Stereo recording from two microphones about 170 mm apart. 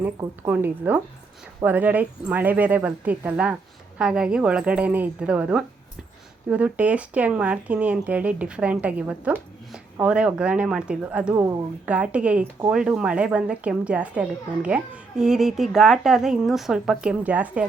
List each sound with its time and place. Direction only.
0.2 s speech: 10° right (ahead or behind)